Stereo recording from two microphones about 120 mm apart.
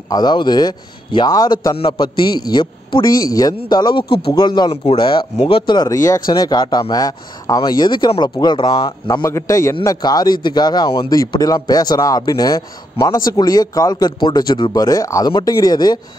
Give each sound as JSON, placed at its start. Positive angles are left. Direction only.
{"t": 0.1, "sound": "a man's voice", "side_deg": 35}
{"t": 9.2, "sound": "a man's voice", "side_deg": 25}